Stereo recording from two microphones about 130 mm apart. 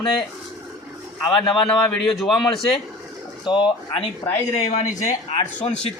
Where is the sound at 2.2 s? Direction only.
Centre (ahead or behind).